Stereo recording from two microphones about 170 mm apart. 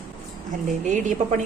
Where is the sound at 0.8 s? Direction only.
45° right (ahead or behind).